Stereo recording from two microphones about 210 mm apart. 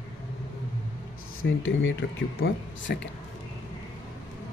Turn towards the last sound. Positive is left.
turn(degrees=60)  # may be behind; listen again after turning